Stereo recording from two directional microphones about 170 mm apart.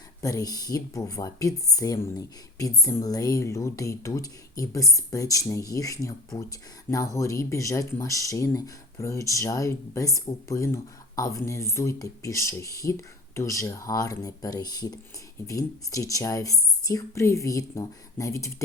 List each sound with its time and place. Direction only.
0.2 s speech: 20° left (ahead or behind)